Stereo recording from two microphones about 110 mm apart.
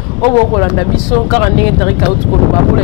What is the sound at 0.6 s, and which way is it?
Speech, centre (ahead or behind).